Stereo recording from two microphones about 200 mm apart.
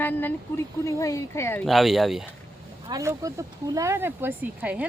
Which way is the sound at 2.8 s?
15° right (ahead or behind).